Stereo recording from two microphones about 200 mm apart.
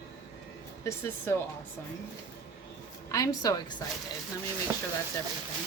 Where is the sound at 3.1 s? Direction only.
20° left (ahead or behind).